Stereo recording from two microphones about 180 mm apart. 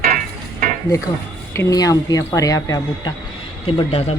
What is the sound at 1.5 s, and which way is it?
A woman's voice, 15° left (ahead or behind).